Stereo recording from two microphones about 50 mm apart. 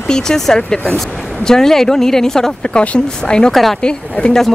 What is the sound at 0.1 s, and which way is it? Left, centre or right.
Speech, centre.